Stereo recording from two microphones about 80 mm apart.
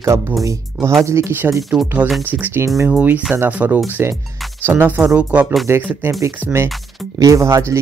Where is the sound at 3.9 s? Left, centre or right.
Right.